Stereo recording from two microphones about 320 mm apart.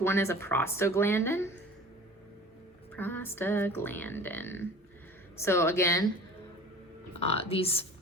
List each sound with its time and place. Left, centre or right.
0.0 s speech: centre
2.9 s speech: centre
7.2 s speech: centre